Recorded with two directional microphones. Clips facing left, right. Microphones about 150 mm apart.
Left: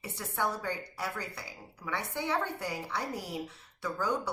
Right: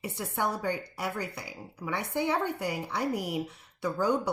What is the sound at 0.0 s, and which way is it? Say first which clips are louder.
A woman's voice: right 3 dB; 15° right (ahead or behind).